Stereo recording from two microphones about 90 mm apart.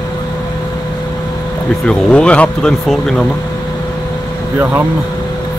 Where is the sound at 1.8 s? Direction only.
10° left (ahead or behind).